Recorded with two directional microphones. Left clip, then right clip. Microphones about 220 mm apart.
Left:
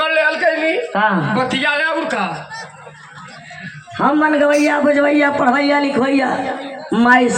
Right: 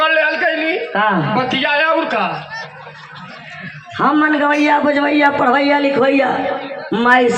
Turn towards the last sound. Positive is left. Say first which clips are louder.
# even
turn(degrees=10)  # may be behind; listen again after turning